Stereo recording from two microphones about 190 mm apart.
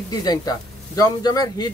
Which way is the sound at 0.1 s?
20° left (ahead or behind).